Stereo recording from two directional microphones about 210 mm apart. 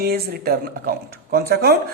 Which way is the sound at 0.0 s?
50° right (ahead or behind).